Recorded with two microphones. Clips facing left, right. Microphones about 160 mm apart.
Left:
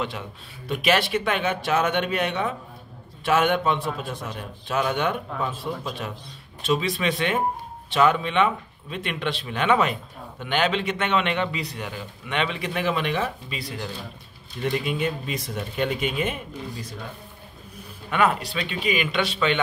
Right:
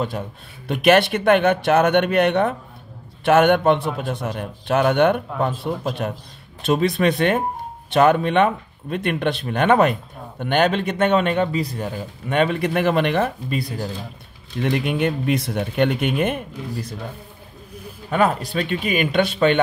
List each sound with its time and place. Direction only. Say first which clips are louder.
0.7 s speech: right 7 dB; 60° right (ahead or behind)
14.6 s speech: right 5 dB; 65° right (ahead or behind)
18.1 s speech: right 3 dB; 40° right (ahead or behind)